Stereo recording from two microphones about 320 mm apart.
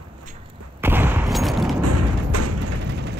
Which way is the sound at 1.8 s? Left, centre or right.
Right.